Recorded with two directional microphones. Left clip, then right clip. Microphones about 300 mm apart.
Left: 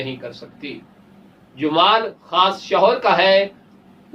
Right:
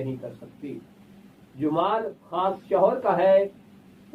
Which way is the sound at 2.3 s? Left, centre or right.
Centre.